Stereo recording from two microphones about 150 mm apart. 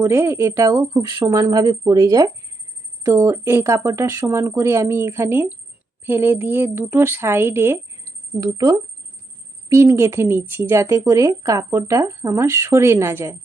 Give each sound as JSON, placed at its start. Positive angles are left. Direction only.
{"t": 0.0, "sound": "a woman's voice", "side_deg": -15}